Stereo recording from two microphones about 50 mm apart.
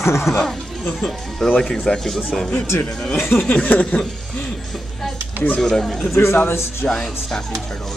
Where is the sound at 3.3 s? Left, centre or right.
Left.